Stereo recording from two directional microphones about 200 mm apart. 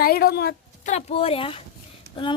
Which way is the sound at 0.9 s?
30° left (ahead or behind).